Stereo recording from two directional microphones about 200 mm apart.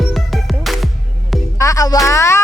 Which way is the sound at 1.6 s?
15° left (ahead or behind).